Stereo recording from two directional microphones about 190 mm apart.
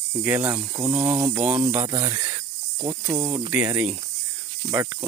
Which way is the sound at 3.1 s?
5° right (ahead or behind).